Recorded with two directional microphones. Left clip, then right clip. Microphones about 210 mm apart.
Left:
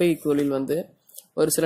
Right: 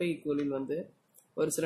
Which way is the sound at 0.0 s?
25° left (ahead or behind).